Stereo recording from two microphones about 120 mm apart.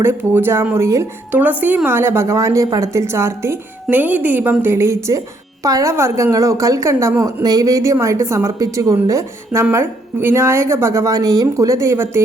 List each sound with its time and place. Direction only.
0.0 s a woman's voice: 20° right (ahead or behind)